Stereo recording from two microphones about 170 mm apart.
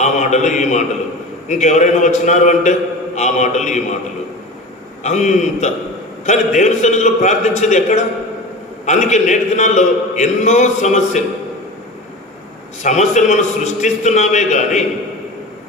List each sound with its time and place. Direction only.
0.0 s a man's voice: 45° left (ahead or behind)
5.0 s a man's voice: 45° left (ahead or behind)
12.8 s a man's voice: 45° left (ahead or behind)